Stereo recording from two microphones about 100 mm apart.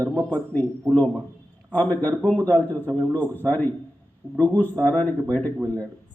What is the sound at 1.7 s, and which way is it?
A man's voice, 15° left (ahead or behind).